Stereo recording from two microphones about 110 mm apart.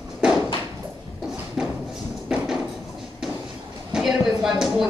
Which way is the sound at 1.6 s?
10° right (ahead or behind).